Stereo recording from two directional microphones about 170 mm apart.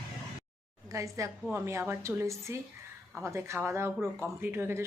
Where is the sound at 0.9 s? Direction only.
20° right (ahead or behind).